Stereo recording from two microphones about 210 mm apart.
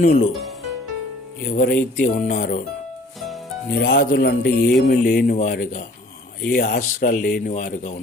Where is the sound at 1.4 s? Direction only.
45° left (ahead or behind).